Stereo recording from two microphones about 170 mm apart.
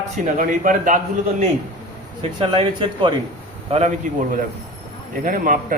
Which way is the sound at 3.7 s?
45° right (ahead or behind).